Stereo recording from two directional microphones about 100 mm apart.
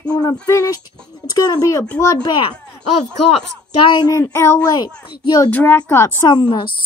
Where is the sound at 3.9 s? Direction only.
40° left (ahead or behind).